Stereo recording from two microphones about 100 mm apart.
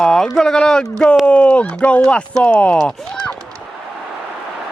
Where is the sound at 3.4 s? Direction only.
35° right (ahead or behind).